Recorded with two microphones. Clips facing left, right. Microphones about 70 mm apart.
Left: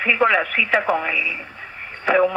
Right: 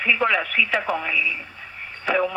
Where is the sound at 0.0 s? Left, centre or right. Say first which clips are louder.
Left 3 dB; left.